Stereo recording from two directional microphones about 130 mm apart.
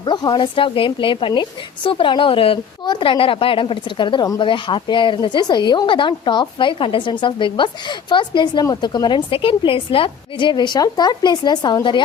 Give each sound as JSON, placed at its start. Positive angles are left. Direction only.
{"t": 0.0, "sound": "speech", "side_deg": 35}